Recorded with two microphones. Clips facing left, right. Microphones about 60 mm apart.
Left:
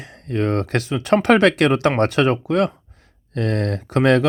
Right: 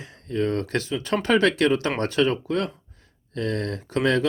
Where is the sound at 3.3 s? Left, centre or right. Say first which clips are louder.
Left 5 dB; left.